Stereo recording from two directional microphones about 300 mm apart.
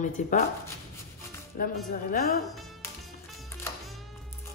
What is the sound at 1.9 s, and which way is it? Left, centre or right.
Speech, left.